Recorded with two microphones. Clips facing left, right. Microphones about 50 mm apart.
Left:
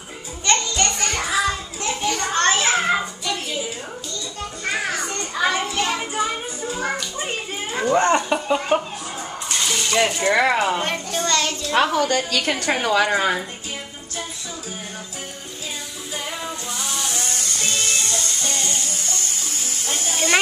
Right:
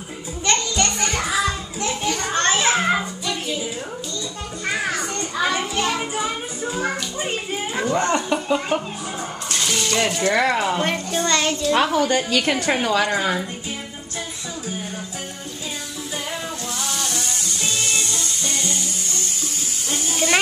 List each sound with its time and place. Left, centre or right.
0.5 s music: centre
1.8 s children playing: centre
5.3 s children playing: centre
7.9 s speech: centre
10.8 s a woman's voice: centre
11.2 s a child's voice: centre
11.7 s a woman's voice: centre
12.2 s a woman's voice: centre
16.7 s a sound: centre
18.0 s music: left